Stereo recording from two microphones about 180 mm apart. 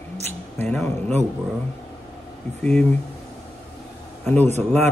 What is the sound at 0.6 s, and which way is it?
Speech, 10° left (ahead or behind).